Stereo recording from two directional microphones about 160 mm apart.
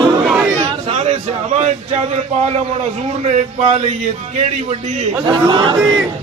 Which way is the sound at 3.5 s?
45° right (ahead or behind).